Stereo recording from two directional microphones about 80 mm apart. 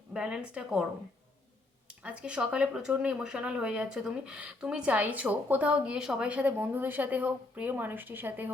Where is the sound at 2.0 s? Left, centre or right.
Centre.